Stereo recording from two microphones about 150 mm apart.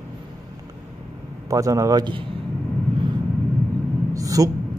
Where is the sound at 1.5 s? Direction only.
20° right (ahead or behind).